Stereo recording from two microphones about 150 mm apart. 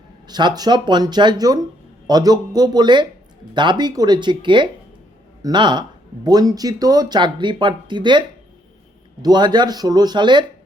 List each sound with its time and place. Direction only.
0.3 s speech: 30° right (ahead or behind)
9.2 s speech: 30° right (ahead or behind)